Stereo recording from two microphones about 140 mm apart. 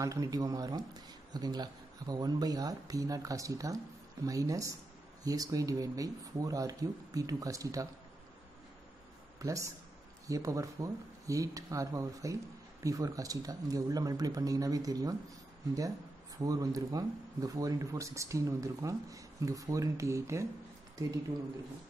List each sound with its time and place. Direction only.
0.0 s speech: 25° right (ahead or behind)
9.4 s speech: 20° right (ahead or behind)